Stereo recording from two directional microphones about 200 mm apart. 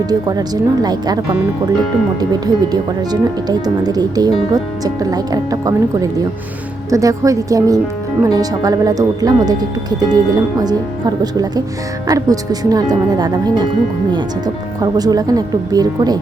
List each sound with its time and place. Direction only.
0.0 s a woman's voice: 20° right (ahead or behind)